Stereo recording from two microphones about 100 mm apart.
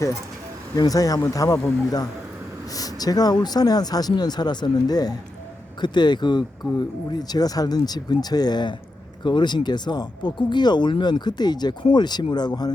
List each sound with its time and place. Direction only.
0.8 s speech: 35° left (ahead or behind)